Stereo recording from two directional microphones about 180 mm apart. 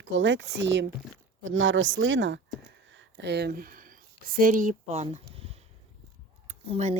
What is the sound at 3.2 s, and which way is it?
Speech, 65° right (ahead or behind).